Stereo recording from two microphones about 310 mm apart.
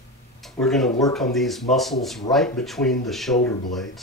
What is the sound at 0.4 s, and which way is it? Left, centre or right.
A man's voice, centre.